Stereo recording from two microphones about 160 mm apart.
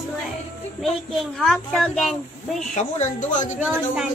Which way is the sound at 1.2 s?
Centre (ahead or behind).